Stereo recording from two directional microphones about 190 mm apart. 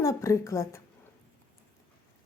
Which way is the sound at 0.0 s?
15° left (ahead or behind).